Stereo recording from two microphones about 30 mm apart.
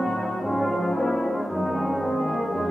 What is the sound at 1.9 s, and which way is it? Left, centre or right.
Music, centre.